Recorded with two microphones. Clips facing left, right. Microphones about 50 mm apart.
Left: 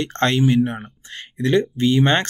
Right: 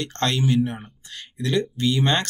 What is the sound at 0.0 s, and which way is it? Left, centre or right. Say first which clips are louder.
Speech: left 5 dB; left.